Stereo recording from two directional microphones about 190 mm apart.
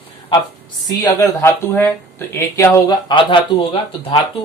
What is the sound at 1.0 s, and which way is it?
Speech, 15° left (ahead or behind).